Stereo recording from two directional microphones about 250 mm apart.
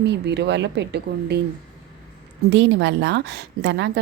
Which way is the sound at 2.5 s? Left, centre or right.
Right.